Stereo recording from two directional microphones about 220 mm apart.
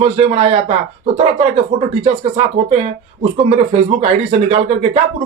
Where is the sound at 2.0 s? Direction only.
25° right (ahead or behind).